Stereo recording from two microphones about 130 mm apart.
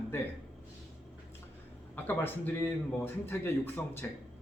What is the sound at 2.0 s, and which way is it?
Speech, 15° left (ahead or behind).